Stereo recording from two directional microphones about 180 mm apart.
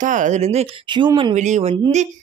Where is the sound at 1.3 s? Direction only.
40° right (ahead or behind).